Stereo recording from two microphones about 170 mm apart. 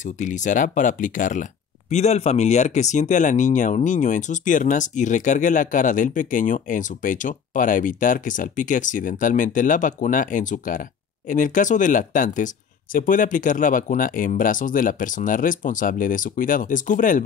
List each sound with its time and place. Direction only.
0.0 s speech: 45° left (ahead or behind)